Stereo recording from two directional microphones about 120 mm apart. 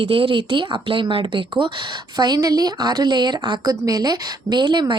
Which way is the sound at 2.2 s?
35° right (ahead or behind).